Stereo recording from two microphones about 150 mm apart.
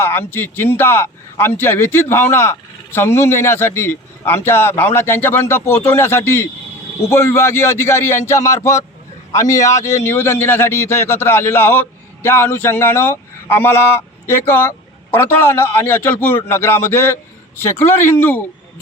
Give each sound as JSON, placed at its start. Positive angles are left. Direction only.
{"t": 0.0, "sound": "a man's voice", "side_deg": 15}